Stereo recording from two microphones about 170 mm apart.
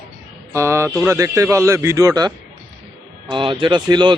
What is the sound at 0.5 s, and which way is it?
Speech, 15° right (ahead or behind).